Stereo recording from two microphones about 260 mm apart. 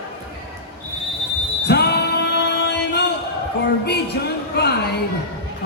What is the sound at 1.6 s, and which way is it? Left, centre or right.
Basketball bounce, left.